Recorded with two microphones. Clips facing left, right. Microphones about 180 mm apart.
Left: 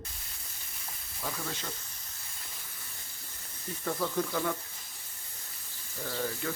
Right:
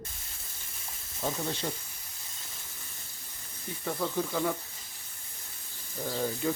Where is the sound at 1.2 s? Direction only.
25° right (ahead or behind).